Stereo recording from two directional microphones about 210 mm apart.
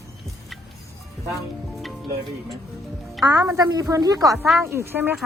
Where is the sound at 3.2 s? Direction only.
15° right (ahead or behind).